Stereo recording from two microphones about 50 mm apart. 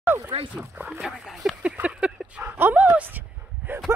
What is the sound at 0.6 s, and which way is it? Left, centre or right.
Speech, right.